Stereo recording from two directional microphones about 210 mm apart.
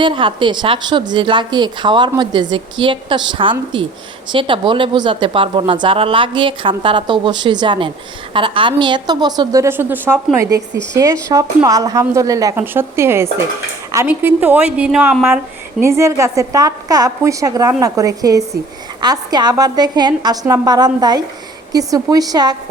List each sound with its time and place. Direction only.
0.0 s a woman's voice: 25° right (ahead or behind)